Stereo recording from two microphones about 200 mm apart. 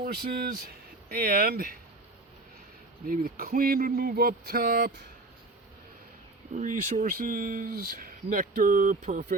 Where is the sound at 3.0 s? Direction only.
45° right (ahead or behind).